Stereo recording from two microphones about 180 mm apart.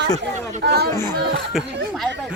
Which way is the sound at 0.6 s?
65° right (ahead or behind).